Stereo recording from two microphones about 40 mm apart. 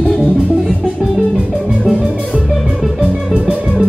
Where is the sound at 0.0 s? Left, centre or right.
Centre.